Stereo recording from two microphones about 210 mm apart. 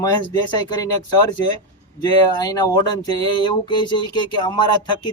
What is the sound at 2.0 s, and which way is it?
Speech, 20° left (ahead or behind).